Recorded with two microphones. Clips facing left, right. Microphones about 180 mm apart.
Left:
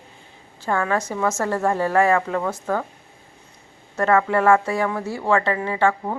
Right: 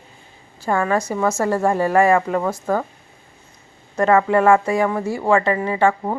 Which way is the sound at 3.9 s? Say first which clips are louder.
Right 3 dB; 20° right (ahead or behind).